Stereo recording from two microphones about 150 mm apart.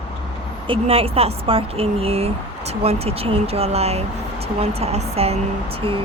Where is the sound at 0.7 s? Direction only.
40° right (ahead or behind).